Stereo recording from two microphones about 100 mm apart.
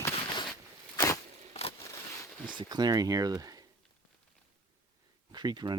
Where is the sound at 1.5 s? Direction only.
90° left.